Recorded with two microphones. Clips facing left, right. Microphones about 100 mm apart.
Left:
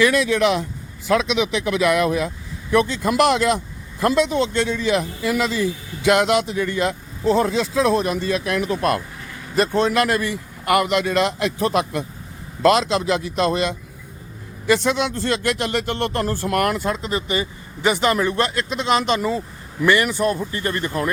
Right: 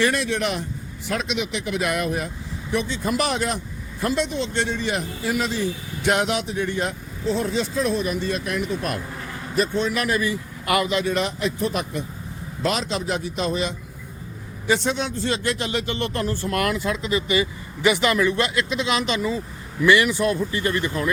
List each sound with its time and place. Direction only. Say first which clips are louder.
0.1 s speech: left 6 dB; 90° left
1.9 s a man's voice: left 6 dB; 90° left; by 21.1 s 45° left (ahead or behind)